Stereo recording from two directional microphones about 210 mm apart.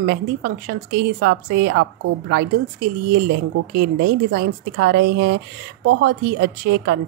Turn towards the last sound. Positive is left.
turn(degrees=-45)  # may be behind; listen again after turning